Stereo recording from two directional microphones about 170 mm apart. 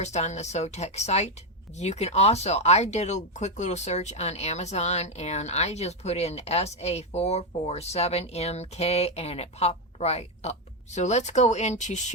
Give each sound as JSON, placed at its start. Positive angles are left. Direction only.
{"t": 0.0, "sound": "speech", "side_deg": 40}